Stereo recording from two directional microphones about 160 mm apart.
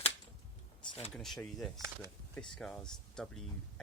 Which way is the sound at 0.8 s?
35° left (ahead or behind).